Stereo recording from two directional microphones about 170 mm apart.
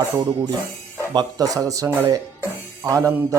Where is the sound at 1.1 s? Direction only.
25° right (ahead or behind).